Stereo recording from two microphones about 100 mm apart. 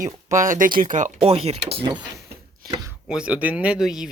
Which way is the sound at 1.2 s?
85° right.